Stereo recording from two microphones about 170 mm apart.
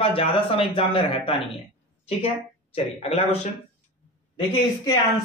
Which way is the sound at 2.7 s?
35° left (ahead or behind).